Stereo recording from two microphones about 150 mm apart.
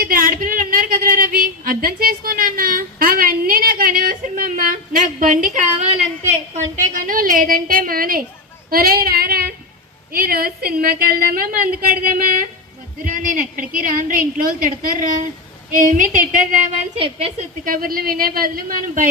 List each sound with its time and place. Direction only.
0.0 s a sound: 70° right (ahead or behind)
8.7 s female singing: 80° right
10.1 s a woman's voice: 75° right (ahead or behind)
17.0 s a woman's voice: 40° right (ahead or behind)
17.7 s a woman's voice: 75° right (ahead or behind)